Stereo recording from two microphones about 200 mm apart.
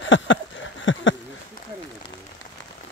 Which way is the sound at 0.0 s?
70° left (ahead or behind).